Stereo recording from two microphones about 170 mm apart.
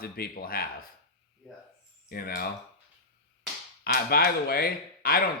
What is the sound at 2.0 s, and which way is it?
Speech, 65° left (ahead or behind).